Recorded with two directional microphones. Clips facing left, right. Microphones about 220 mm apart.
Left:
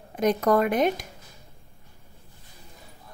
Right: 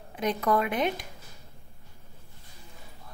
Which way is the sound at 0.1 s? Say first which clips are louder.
Left 5 dB; 45° left (ahead or behind).